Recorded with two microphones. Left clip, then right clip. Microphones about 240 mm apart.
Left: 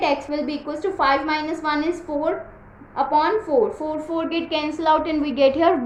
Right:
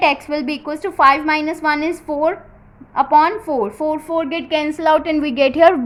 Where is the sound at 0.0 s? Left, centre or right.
Right.